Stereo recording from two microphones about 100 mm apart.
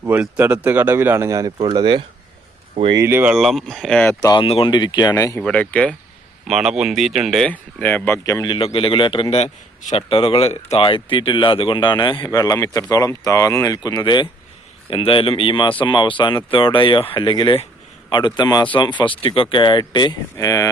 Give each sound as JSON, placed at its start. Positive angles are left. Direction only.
{"t": 0.0, "sound": "speech", "side_deg": -20}
{"t": 1.5, "sound": "speech", "side_deg": -50}
{"t": 3.0, "sound": "speech", "side_deg": -25}
{"t": 3.2, "sound": "speech", "side_deg": 0}
{"t": 4.4, "sound": "speech", "side_deg": 60}
{"t": 5.4, "sound": "speech", "side_deg": 10}
{"t": 6.5, "sound": "speech", "side_deg": -5}
{"t": 7.5, "sound": "speech", "side_deg": 15}
{"t": 8.2, "sound": "speech", "side_deg": 35}
{"t": 8.4, "sound": "speech", "side_deg": 60}
{"t": 12.3, "sound": "speech", "side_deg": 40}
{"t": 14.8, "sound": "speech", "side_deg": 60}
{"t": 20.4, "sound": "speech", "side_deg": 35}